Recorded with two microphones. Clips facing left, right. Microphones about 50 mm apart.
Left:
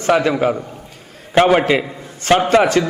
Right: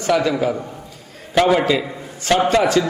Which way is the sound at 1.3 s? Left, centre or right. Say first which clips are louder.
Left 3 dB; left.